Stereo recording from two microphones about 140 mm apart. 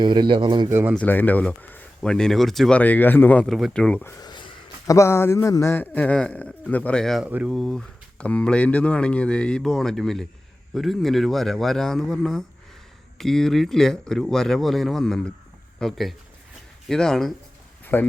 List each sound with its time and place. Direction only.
0.0 s speech: 35° right (ahead or behind)
0.7 s speech: 15° right (ahead or behind)
0.9 s speech: 10° left (ahead or behind)
3.4 s speech: centre (ahead or behind)
4.2 s a sound: 35° left (ahead or behind)
4.9 s speech: 20° left (ahead or behind); by 7.3 s centre (ahead or behind)
7.3 s speech: 10° right (ahead or behind)
7.5 s speech: centre (ahead or behind)
17.9 s speech: 15° left (ahead or behind)